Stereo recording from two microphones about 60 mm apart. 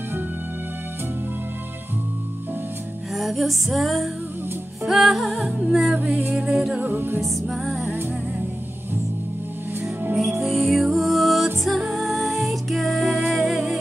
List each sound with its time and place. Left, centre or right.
3.2 s music: centre
5.9 s music: right
6.5 s music: centre
6.8 s music: right
7.2 s music: centre
10.1 s music: centre